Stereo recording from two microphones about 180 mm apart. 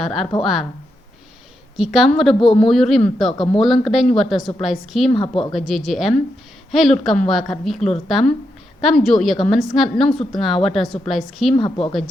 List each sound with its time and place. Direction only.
0.0 s a woman's voice: centre (ahead or behind)
1.7 s a woman's voice: centre (ahead or behind)
3.3 s a woman's voice: 30° left (ahead or behind)
3.6 s a woman's voice: centre (ahead or behind)
5.1 s a woman's voice: 30° left (ahead or behind)
5.5 s a woman's voice: centre (ahead or behind)
11.5 s a woman's voice: 25° left (ahead or behind)